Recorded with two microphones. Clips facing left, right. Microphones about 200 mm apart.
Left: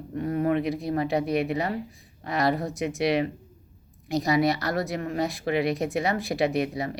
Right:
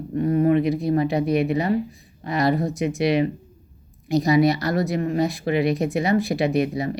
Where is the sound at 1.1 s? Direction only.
Centre (ahead or behind).